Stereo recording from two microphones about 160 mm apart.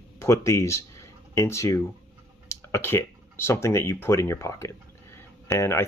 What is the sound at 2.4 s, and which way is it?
Speech, 15° left (ahead or behind).